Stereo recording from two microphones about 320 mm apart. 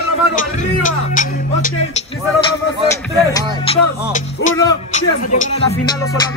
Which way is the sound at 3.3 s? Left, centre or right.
Centre.